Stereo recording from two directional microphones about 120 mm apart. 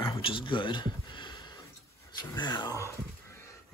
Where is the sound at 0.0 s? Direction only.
45° left (ahead or behind).